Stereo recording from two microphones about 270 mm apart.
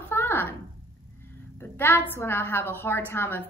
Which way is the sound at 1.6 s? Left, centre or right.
Centre.